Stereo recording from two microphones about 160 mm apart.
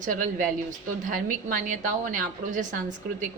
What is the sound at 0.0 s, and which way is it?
A woman's voice, 55° right (ahead or behind).